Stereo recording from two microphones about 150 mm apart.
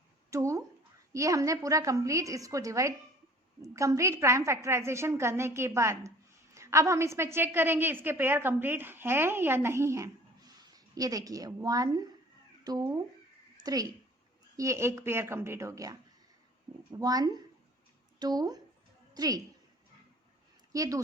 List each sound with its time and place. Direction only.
0.3 s a woman's voice: 20° right (ahead or behind)
17.0 s a woman's voice: 25° right (ahead or behind)
20.7 s a woman's voice: 25° right (ahead or behind)